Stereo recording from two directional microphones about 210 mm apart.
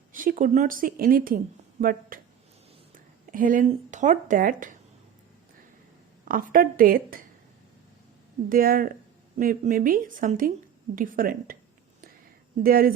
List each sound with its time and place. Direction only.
0.1 s speech: 40° right (ahead or behind)
3.3 s speech: 40° right (ahead or behind)
6.2 s a woman's voice: 40° right (ahead or behind)
8.4 s a woman's voice: 45° right (ahead or behind)
12.6 s a woman's voice: 45° right (ahead or behind)